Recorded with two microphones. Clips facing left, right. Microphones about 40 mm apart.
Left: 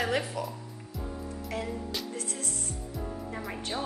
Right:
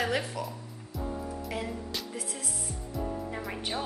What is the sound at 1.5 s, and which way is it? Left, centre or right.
Music, centre.